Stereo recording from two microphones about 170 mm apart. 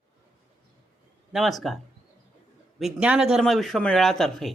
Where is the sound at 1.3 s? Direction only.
Centre (ahead or behind).